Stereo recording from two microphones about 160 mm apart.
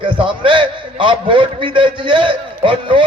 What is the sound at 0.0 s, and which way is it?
A man's voice, 30° right (ahead or behind).